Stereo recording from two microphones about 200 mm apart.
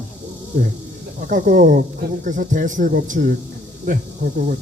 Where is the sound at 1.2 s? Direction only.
40° right (ahead or behind).